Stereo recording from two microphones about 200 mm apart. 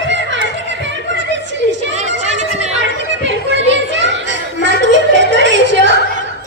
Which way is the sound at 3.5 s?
65° right (ahead or behind).